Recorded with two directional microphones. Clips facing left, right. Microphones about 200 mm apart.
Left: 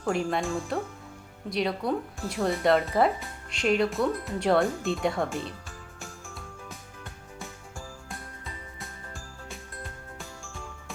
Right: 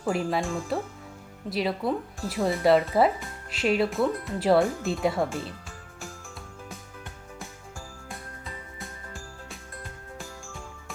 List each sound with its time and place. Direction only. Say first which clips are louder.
0.1 s speech: even; centre (ahead or behind)
6.0 s music: right 2 dB; centre (ahead or behind)